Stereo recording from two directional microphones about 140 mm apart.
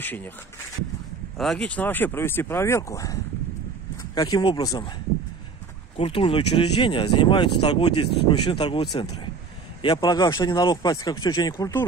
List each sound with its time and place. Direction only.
0.0 s speech: 15° left (ahead or behind)
1.4 s speech: 5° left (ahead or behind); by 4.9 s 25° left (ahead or behind)
5.9 s speech: 40° left (ahead or behind); by 11.8 s 20° left (ahead or behind)